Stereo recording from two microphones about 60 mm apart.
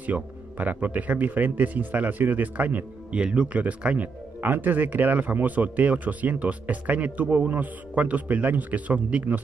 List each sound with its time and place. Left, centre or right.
0.0 s speech: right
4.4 s speech: right